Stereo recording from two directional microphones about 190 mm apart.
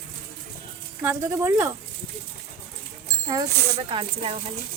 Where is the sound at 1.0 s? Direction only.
15° right (ahead or behind).